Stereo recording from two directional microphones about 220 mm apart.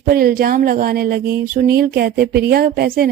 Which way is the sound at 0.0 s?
40° right (ahead or behind).